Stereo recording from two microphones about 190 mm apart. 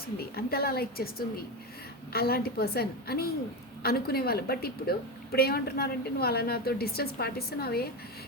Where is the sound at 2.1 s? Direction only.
55° left (ahead or behind).